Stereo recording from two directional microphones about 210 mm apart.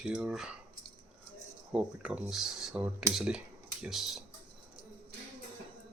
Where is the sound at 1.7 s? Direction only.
5° right (ahead or behind).